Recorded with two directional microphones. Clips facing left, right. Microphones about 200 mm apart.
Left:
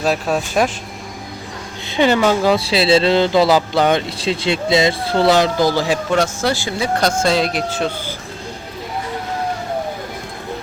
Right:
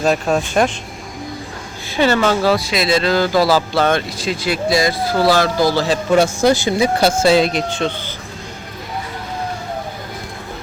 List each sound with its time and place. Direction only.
0.0 s speech: 5° left (ahead or behind)
2.0 s speech: 15° left (ahead or behind)
2.6 s speech: 30° left (ahead or behind); by 6.0 s 15° left (ahead or behind)
6.1 s speech: 10° right (ahead or behind); by 8.1 s 5° left (ahead or behind)